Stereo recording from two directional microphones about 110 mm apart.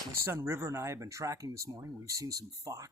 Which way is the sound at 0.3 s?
25° right (ahead or behind).